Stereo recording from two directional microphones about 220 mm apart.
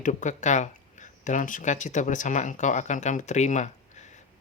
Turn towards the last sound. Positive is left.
turn(degrees=30)  # may be behind; listen again after turning